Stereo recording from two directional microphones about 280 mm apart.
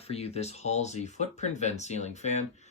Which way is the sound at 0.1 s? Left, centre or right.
Left.